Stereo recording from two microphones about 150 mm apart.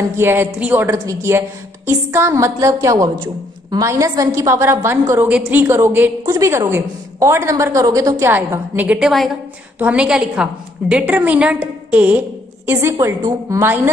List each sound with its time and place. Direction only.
0.1 s a woman's voice: 15° right (ahead or behind)